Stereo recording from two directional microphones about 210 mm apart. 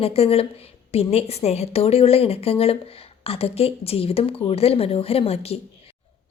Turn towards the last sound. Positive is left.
turn(degrees=30)  # may be behind; listen again after turning